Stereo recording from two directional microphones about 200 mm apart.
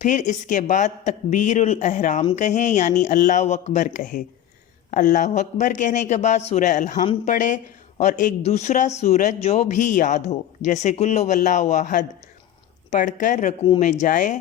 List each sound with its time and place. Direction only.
0.0 s a man's voice: 40° left (ahead or behind)